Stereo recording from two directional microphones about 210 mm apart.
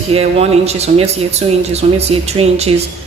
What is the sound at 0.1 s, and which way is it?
Speech, 30° right (ahead or behind).